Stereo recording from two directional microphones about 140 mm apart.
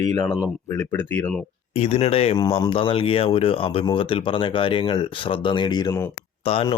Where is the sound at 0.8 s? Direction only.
15° left (ahead or behind).